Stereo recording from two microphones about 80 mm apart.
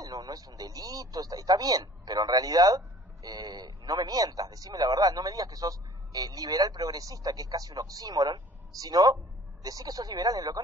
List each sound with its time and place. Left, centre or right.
0.0 s speech: right